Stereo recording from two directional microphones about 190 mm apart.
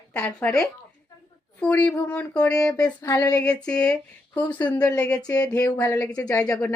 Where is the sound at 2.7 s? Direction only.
15° left (ahead or behind).